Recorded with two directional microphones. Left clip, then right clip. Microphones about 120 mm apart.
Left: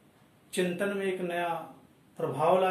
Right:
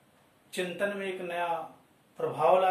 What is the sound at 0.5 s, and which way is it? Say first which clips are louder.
Speech: left 1 dB; 10° left (ahead or behind).